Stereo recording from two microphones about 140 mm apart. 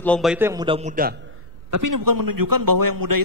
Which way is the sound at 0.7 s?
40° right (ahead or behind).